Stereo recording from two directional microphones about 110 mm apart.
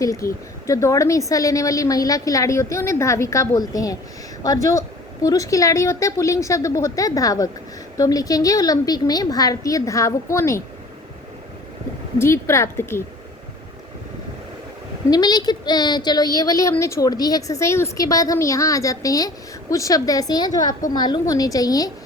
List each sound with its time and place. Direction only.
0.0 s a woman's voice: 30° left (ahead or behind)
12.2 s a woman's voice: 25° left (ahead or behind)
15.1 s a woman's voice: 40° left (ahead or behind)